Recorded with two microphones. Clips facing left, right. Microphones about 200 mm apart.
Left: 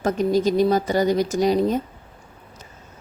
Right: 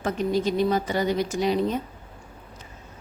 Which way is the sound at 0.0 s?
40° left (ahead or behind).